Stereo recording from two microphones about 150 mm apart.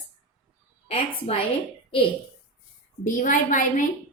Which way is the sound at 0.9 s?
40° left (ahead or behind).